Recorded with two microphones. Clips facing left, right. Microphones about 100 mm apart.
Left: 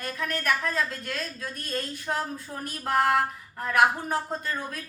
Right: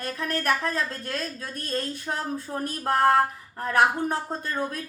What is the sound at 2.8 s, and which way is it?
Speech, 30° right (ahead or behind).